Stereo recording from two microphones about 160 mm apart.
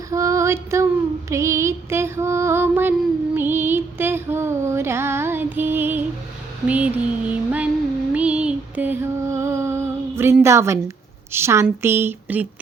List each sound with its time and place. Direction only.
0.1 s female singing: 20° right (ahead or behind)
1.3 s music: 20° right (ahead or behind)
6.7 s a sound: 10° right (ahead or behind)
8.1 s music: 10° right (ahead or behind)
10.4 s a woman's voice: 15° right (ahead or behind)